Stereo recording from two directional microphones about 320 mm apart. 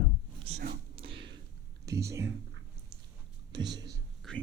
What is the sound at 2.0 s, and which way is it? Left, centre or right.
Speech, centre.